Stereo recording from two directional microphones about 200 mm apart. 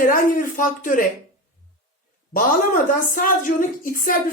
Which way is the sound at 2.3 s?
40° left (ahead or behind).